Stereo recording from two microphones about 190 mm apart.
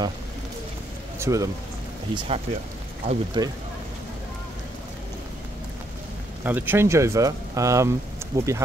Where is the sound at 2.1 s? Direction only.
30° right (ahead or behind).